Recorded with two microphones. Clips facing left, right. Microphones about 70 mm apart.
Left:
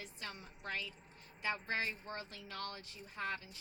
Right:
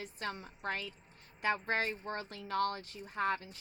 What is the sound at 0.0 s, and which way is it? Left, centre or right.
A woman's voice, right.